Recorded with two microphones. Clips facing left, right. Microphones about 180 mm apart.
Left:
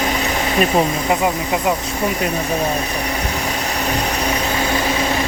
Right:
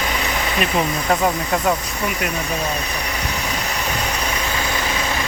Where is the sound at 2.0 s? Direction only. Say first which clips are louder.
Left 4 dB; 30° left (ahead or behind).